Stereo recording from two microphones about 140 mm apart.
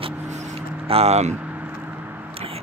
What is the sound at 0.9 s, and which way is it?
Speech, 50° right (ahead or behind).